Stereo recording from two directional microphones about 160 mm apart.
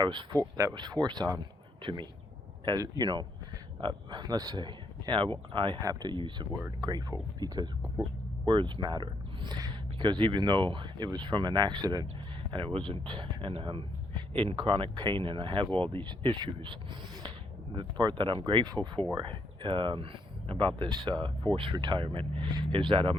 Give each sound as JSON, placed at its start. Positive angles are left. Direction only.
{"t": 0.0, "sound": "speech", "side_deg": -25}
{"t": 17.7, "sound": "speech", "side_deg": -30}